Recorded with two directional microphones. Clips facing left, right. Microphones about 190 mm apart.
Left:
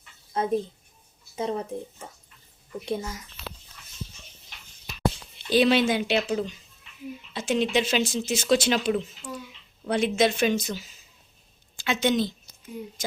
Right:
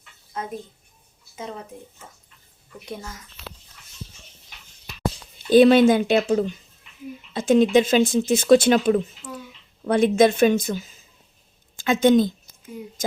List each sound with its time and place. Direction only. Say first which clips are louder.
0.4 s speech: left 5 dB; 30° left (ahead or behind)
2.8 s a child's voice: left 5 dB; 20° left (ahead or behind)
5.5 s speech: right 8 dB; 50° right (ahead or behind)